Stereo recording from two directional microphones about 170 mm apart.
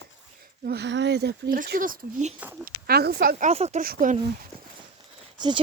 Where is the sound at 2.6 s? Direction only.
65° right (ahead or behind).